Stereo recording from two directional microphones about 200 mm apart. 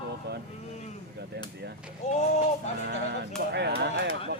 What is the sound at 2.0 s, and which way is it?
Speech, 35° left (ahead or behind).